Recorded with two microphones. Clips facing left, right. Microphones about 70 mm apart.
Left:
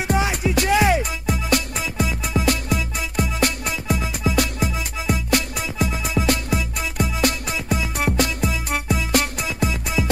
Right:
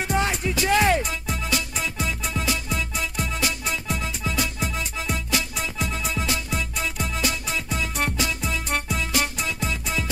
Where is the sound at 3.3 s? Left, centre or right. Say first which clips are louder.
Left 4 dB; left.